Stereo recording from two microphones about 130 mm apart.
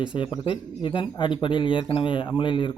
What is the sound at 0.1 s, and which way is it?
A man's voice, 40° left (ahead or behind).